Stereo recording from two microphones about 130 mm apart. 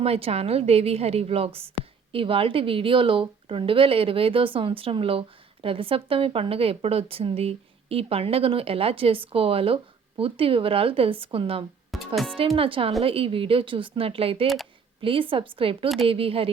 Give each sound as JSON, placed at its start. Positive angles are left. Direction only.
{"t": 0.0, "sound": "speech", "side_deg": -50}
{"t": 11.9, "sound": "speech", "side_deg": 0}
{"t": 12.5, "sound": "speech", "side_deg": -45}
{"t": 14.4, "sound": "speech", "side_deg": 0}
{"t": 15.0, "sound": "speech", "side_deg": -45}